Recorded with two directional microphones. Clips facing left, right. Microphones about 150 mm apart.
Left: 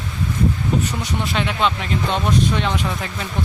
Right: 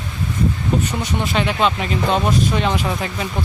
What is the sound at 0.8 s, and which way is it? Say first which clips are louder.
Speech: right 2 dB; centre (ahead or behind).